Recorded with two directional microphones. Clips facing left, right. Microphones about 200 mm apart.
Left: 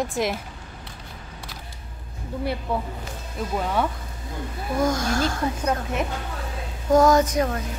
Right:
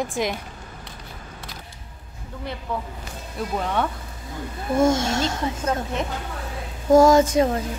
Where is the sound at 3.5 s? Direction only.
5° left (ahead or behind).